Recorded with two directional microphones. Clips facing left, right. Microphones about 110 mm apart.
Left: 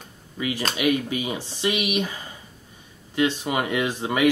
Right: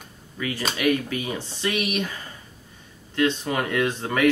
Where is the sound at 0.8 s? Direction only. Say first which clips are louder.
Even; 15° left (ahead or behind).